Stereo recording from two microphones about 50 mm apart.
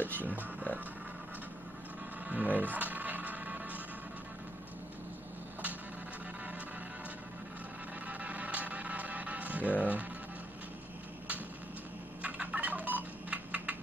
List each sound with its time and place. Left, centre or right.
0.2 s speech: right
2.2 s music: right
8.1 s music: right
12.2 s typing: right